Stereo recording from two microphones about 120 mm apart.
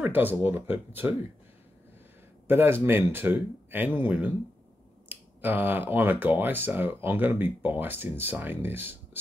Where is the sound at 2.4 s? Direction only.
20° right (ahead or behind).